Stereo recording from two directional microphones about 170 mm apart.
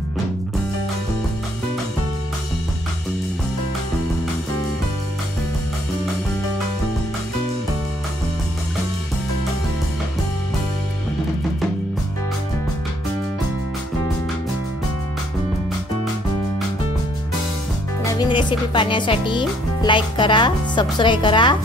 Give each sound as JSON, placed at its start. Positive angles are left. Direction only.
{"t": 18.0, "sound": "speech", "side_deg": 30}